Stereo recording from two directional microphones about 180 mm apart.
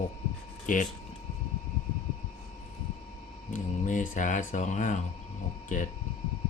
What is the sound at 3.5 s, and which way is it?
Speech, 45° left (ahead or behind).